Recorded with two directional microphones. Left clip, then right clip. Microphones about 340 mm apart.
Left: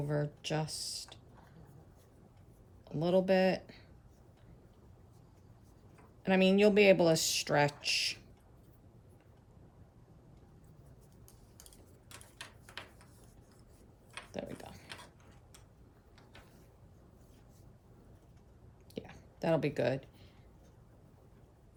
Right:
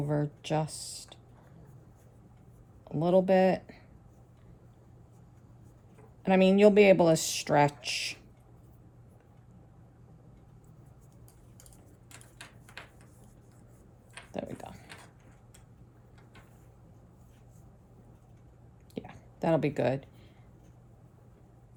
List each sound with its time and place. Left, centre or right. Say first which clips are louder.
0.0 s speech: right 4 dB; centre
2.8 s speech: right 5 dB; centre
6.2 s speech: right 5 dB; centre
12.1 s a sound: even; centre
14.3 s pig: right 5 dB; centre
18.9 s a sound: right 4 dB; centre